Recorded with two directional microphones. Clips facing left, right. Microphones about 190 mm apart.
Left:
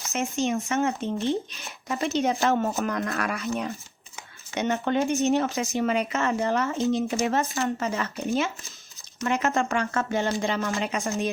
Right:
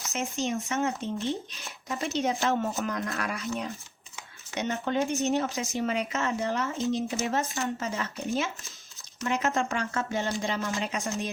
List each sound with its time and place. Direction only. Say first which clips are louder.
0.1 s speech: left 4 dB; 60° left (ahead or behind)